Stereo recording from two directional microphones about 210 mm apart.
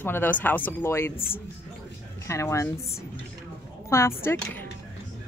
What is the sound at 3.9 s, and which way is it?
Speech, 10° left (ahead or behind).